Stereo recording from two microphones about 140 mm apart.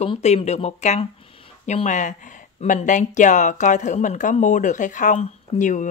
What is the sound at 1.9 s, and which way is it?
Speech, 65° left (ahead or behind).